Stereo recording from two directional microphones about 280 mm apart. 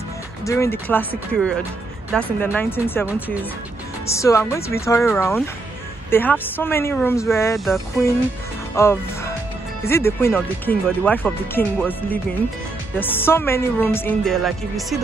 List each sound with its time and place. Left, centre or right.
0.5 s speech: centre
4.1 s speech: centre